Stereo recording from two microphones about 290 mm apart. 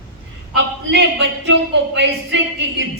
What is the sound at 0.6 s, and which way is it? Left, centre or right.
Speech, right.